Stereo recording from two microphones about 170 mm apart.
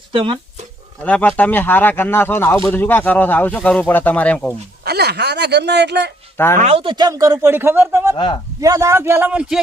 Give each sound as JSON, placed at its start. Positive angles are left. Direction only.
{"t": 0.1, "sound": "speech", "side_deg": -30}
{"t": 1.0, "sound": "speech", "side_deg": 10}
{"t": 4.9, "sound": "speech", "side_deg": -75}
{"t": 6.3, "sound": "speech", "side_deg": 15}
{"t": 6.6, "sound": "speech", "side_deg": -35}
{"t": 8.1, "sound": "speech", "side_deg": 30}
{"t": 8.6, "sound": "a man's voice", "side_deg": -20}